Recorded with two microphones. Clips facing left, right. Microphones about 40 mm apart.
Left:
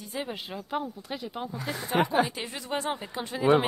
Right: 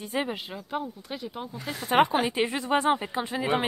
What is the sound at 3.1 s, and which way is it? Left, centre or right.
Speech, centre.